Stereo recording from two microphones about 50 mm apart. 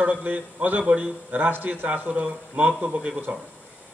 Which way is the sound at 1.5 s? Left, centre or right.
Right.